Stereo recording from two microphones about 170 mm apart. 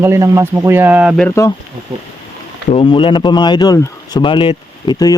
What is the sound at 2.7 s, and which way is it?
Speech, 30° left (ahead or behind).